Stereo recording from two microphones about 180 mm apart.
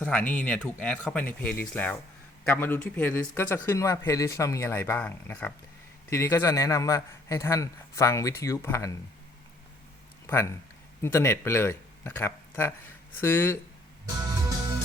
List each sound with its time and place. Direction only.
0.0 s speech: 10° left (ahead or behind)
10.2 s speech: 15° left (ahead or behind)